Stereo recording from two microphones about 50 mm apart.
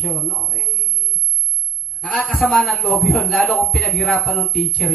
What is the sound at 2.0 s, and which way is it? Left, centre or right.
Speech, left.